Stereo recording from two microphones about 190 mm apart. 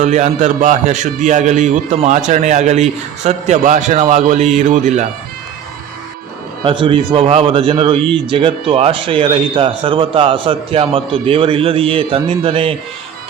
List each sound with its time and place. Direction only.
0.0 s a man's voice: 40° right (ahead or behind)
6.7 s a man's voice: 25° right (ahead or behind)